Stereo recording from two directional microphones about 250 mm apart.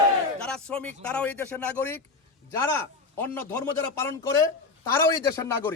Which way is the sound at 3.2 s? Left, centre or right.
Centre.